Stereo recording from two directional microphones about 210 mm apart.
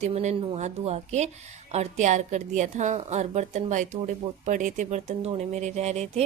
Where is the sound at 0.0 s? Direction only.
35° right (ahead or behind).